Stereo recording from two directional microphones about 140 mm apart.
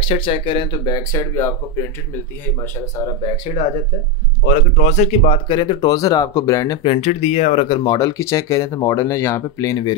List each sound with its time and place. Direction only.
0.0 s speech: 40° left (ahead or behind); by 3.1 s 20° left (ahead or behind)
4.7 s speech: 55° left (ahead or behind); by 6.9 s 25° left (ahead or behind)
6.9 s speech: 45° left (ahead or behind)
7.6 s speech: 30° left (ahead or behind)